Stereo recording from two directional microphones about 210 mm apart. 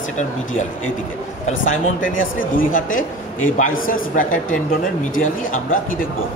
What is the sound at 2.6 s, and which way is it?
A man's voice, 40° left (ahead or behind).